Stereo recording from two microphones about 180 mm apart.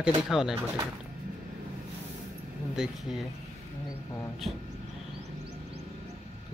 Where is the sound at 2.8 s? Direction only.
Centre (ahead or behind).